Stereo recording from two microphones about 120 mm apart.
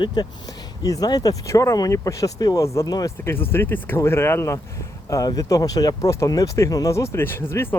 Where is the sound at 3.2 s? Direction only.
20° left (ahead or behind).